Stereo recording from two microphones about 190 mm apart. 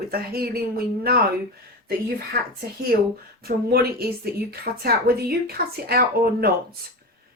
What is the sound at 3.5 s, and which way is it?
Speech, 55° right (ahead or behind).